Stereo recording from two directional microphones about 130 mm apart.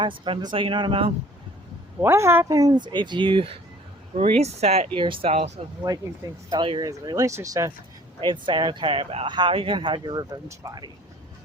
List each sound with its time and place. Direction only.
0.0 s speech: 40° right (ahead or behind)
2.0 s speech: 20° right (ahead or behind)
2.6 s speech: 30° right (ahead or behind)
4.1 s speech: 55° right (ahead or behind)
4.9 s speech: 40° right (ahead or behind)
5.9 s speech: 30° right (ahead or behind)
8.2 s speech: 40° right (ahead or behind)